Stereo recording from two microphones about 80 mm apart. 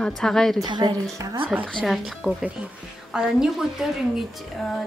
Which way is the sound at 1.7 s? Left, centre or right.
Centre.